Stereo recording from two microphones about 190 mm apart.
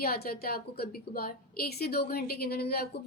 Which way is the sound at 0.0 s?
55° left (ahead or behind).